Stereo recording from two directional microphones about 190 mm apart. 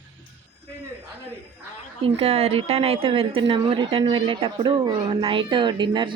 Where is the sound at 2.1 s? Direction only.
30° right (ahead or behind).